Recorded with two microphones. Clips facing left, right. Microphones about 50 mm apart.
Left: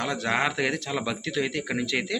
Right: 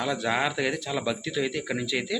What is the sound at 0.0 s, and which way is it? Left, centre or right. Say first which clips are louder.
Speech: even; left.